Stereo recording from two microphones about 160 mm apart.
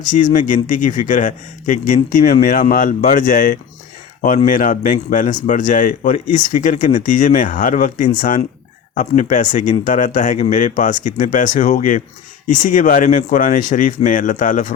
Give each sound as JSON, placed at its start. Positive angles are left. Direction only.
{"t": 0.3, "sound": "a man's voice", "side_deg": 55}